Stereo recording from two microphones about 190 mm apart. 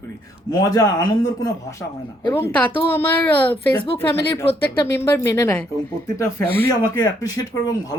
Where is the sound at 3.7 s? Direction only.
25° left (ahead or behind).